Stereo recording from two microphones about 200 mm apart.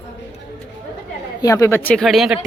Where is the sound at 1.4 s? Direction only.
15° left (ahead or behind); by 2.3 s centre (ahead or behind).